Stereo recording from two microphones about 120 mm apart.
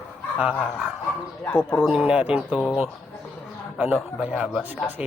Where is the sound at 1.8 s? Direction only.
5° right (ahead or behind).